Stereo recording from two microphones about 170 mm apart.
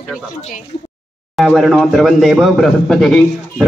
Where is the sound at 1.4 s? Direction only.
Centre (ahead or behind).